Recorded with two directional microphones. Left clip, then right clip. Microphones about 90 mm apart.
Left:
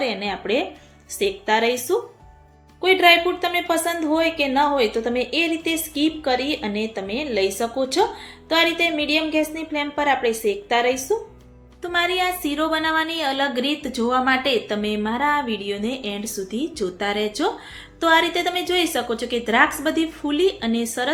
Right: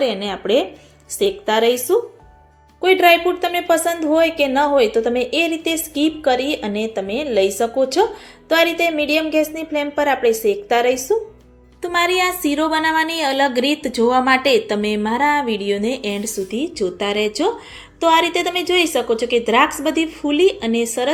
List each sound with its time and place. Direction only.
0.0 s a woman's voice: 30° right (ahead or behind)
11.8 s speech: 45° right (ahead or behind)
16.5 s speech: 10° right (ahead or behind)